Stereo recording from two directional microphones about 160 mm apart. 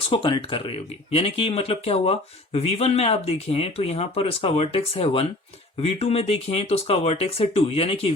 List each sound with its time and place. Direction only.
0.1 s speech: 30° left (ahead or behind)